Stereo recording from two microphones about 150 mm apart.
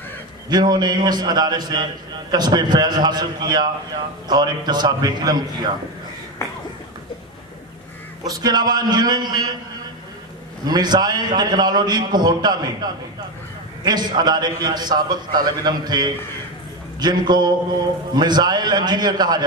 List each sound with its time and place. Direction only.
0.5 s a man's voice: 30° right (ahead or behind)
8.2 s a man's voice: 25° right (ahead or behind)
10.6 s a man's voice: 30° right (ahead or behind)
13.8 s a man's voice: 30° right (ahead or behind)